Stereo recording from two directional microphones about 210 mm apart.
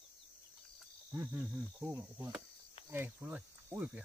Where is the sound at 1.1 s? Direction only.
10° right (ahead or behind).